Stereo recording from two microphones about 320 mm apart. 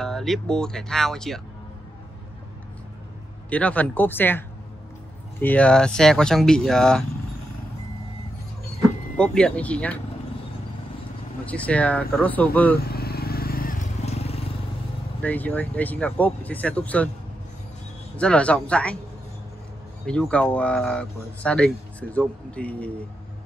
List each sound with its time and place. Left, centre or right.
0.0 s speech: centre
3.4 s speech: centre
9.1 s speech: centre
11.4 s speech: centre
12.7 s vehicle: left
15.2 s speech: centre
18.1 s speech: centre
20.1 s speech: centre